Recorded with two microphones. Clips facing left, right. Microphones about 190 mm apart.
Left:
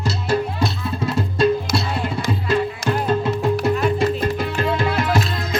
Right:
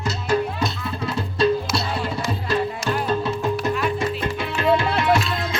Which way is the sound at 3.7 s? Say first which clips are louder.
Left 4 dB; 40° left (ahead or behind).